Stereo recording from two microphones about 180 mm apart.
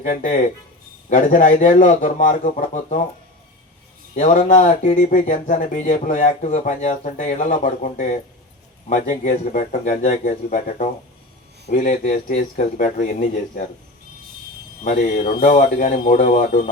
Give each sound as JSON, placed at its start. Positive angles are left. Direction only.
{"t": 0.1, "sound": "speech", "side_deg": 50}
{"t": 4.1, "sound": "speech", "side_deg": 45}
{"t": 15.3, "sound": "speech", "side_deg": 50}